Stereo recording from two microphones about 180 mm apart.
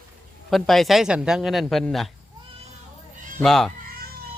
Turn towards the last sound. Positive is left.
turn(degrees=0)  # may be behind; listen again after turning